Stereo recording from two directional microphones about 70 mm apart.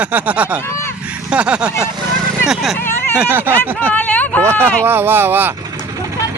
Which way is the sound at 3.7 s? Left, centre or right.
Left.